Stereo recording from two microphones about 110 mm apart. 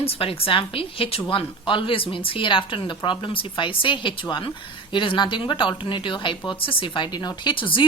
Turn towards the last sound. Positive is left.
turn(degrees=50)  # may be behind; listen again after turning